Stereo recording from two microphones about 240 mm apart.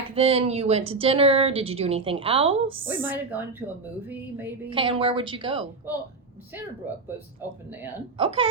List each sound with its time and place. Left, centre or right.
0.1 s speech: right
2.8 s a woman's voice: centre
4.7 s speech: right
8.2 s speech: right